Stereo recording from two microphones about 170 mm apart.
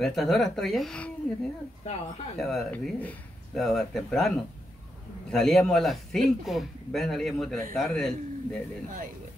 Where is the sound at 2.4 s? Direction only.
Centre (ahead or behind).